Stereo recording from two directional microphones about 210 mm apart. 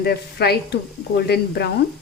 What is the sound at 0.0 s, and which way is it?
Speech, 50° left (ahead or behind).